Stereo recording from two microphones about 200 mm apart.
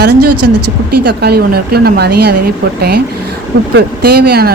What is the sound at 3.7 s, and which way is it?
Speech, 50° right (ahead or behind).